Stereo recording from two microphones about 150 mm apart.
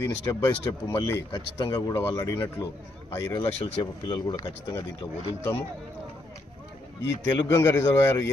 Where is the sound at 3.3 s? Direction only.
40° left (ahead or behind).